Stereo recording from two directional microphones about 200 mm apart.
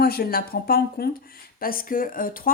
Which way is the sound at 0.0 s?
50° left (ahead or behind).